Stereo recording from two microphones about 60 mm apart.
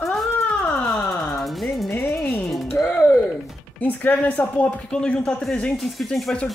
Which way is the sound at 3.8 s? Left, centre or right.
Left.